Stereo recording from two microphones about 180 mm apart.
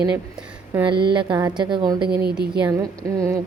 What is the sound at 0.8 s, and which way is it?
Speech, 25° right (ahead or behind).